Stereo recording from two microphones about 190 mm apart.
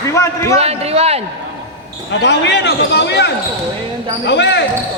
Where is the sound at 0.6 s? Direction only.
35° right (ahead or behind).